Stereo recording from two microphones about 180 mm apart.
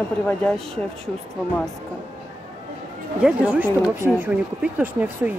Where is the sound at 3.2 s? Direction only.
5° right (ahead or behind).